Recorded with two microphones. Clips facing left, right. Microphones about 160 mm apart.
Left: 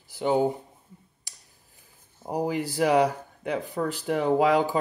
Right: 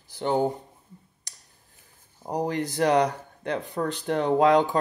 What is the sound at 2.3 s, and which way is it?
Speech, 5° left (ahead or behind).